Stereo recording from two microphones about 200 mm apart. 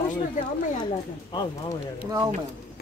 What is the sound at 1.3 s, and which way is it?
Speech, 20° left (ahead or behind).